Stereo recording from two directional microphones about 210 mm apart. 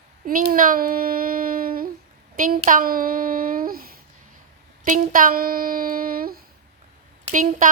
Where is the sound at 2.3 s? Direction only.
40° right (ahead or behind).